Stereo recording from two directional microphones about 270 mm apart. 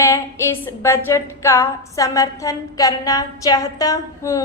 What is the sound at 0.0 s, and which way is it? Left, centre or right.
A woman's voice, centre.